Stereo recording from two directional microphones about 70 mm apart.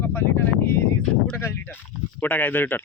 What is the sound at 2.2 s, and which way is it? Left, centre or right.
Speech, left.